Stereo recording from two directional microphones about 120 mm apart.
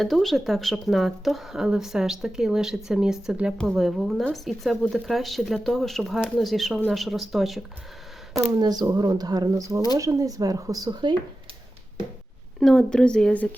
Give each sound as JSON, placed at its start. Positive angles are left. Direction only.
{"t": 0.0, "sound": "speech", "side_deg": 0}
{"t": 8.5, "sound": "speech", "side_deg": -35}
{"t": 12.5, "sound": "speech", "side_deg": 5}